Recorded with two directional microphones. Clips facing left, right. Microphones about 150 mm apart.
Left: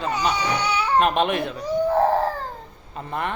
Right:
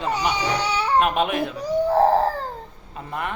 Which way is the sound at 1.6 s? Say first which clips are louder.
Right 2 dB; 35° right (ahead or behind).